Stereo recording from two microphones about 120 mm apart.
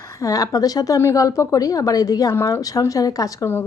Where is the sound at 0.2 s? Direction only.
30° left (ahead or behind).